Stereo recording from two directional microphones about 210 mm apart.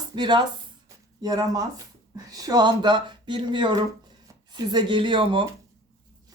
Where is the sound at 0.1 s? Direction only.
20° right (ahead or behind).